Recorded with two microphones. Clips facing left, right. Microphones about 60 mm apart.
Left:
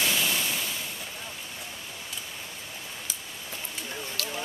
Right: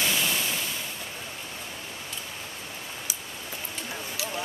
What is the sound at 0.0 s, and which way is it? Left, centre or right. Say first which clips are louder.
Waves: even; centre.